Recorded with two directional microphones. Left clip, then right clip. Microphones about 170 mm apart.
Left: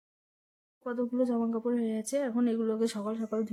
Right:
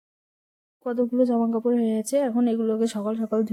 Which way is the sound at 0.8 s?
35° right (ahead or behind).